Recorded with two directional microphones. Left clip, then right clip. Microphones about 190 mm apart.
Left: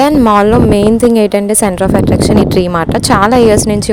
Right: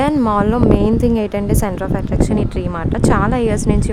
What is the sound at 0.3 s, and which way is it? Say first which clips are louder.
A woman's voice: left 7 dB; 30° left (ahead or behind).